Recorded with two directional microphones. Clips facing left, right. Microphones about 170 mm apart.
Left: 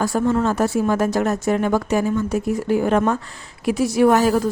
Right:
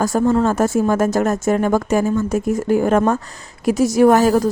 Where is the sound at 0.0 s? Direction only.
45° right (ahead or behind).